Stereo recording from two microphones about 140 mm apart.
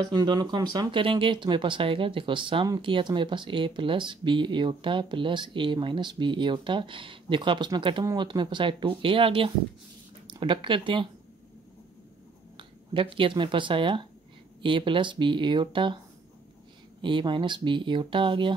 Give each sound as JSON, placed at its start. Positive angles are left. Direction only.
{"t": 0.0, "sound": "speech", "side_deg": -30}
{"t": 12.5, "sound": "speech", "side_deg": -40}
{"t": 17.0, "sound": "speech", "side_deg": -35}